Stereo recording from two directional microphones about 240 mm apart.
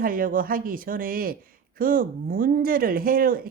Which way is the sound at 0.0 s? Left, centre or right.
Right.